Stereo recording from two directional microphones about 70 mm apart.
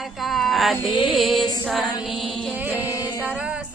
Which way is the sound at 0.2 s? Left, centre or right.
Centre.